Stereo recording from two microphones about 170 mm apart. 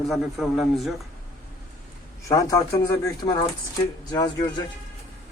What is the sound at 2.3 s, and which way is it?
Speech, 20° left (ahead or behind).